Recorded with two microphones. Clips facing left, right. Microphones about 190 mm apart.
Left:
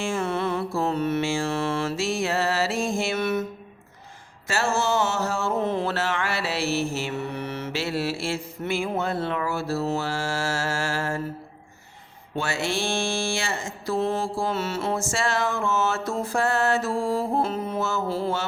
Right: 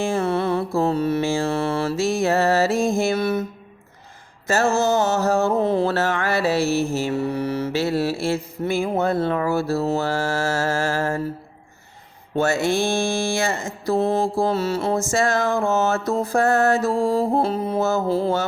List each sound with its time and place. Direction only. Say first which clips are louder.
0.0 s music: right 5 dB; 35° right (ahead or behind)
0.8 s mantra: right 4 dB; 35° right (ahead or behind)
4.9 s mantra: right 5 dB; 40° right (ahead or behind)
8.2 s a sound: right 6 dB; 40° right (ahead or behind)
12.4 s mantra: right 8 dB; 45° right (ahead or behind)
12.9 s a sound: right 5 dB; 40° right (ahead or behind)
15.1 s music: right 6 dB; 40° right (ahead or behind)